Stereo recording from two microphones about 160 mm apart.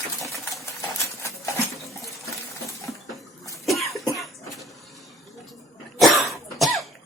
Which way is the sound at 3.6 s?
Centre (ahead or behind).